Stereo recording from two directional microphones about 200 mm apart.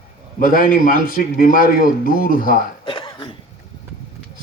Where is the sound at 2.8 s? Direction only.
25° left (ahead or behind).